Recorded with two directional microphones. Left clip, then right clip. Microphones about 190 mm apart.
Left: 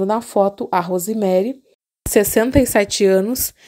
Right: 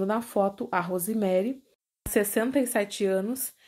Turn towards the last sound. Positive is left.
turn(degrees=50)  # may be behind; listen again after turning